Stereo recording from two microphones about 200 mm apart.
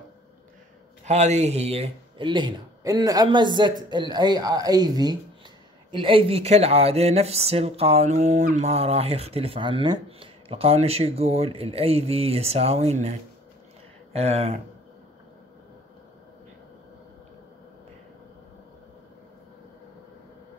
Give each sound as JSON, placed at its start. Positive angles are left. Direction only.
{"t": 1.0, "sound": "speech", "side_deg": -35}
{"t": 14.1, "sound": "speech", "side_deg": -30}